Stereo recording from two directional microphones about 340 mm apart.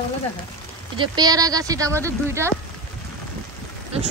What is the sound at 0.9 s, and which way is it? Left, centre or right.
Speech, centre.